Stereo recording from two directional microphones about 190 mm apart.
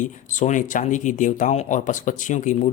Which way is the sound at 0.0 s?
40° left (ahead or behind).